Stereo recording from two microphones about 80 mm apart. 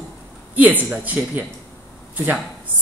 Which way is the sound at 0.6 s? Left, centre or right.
Right.